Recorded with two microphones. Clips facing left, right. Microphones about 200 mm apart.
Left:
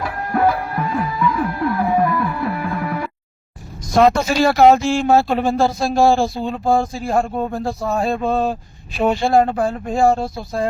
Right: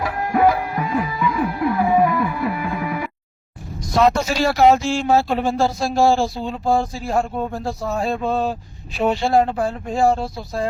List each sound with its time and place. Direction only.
0.3 s music: 15° right (ahead or behind)
4.0 s speech: 55° left (ahead or behind)